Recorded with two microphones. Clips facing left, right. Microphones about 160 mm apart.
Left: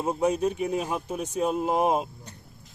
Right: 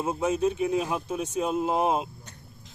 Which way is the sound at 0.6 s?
Centre (ahead or behind).